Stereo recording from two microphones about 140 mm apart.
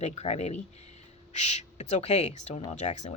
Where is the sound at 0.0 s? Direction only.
50° left (ahead or behind).